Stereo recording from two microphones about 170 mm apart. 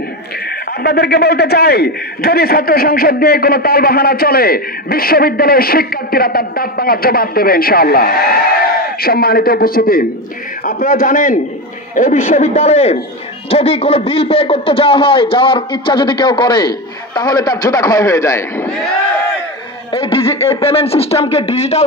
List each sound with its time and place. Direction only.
0.8 s a man's voice: 70° left (ahead or behind); by 18.7 s 15° left (ahead or behind)
19.9 s speech: 35° left (ahead or behind)